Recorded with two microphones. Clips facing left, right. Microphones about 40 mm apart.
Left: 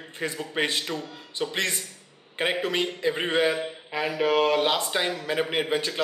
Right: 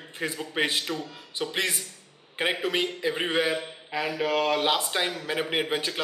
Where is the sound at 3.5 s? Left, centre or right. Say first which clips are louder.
Left 1 dB; centre.